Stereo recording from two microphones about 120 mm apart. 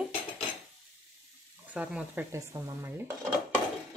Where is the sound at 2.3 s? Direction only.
25° right (ahead or behind).